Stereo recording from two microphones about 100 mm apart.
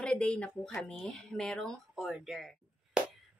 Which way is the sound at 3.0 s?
10° right (ahead or behind).